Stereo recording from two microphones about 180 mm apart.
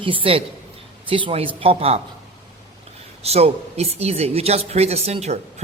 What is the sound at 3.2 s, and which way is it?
Speech, 35° right (ahead or behind).